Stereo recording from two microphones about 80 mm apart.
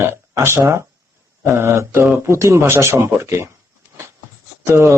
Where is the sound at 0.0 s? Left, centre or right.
Right.